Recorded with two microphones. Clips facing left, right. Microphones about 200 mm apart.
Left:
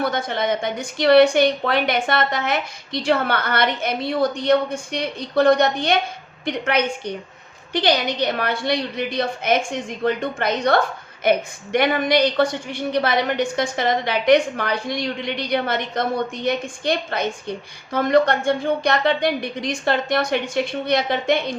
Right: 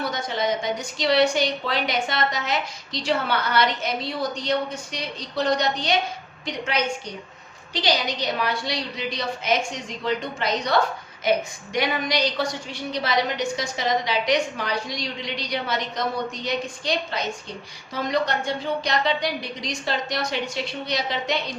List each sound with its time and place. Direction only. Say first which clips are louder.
0.0 s a woman's voice: left 3 dB; 55° left (ahead or behind)